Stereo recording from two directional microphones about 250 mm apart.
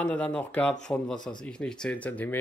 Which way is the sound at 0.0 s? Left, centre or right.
Centre.